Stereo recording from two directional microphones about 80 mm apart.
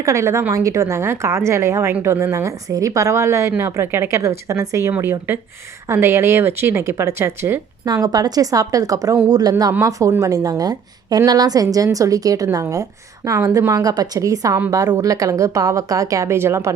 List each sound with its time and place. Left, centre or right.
0.0 s a woman's voice: right
8.0 s a woman's voice: right